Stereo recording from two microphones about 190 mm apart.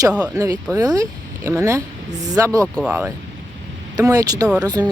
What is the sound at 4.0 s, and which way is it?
Speech, 20° right (ahead or behind).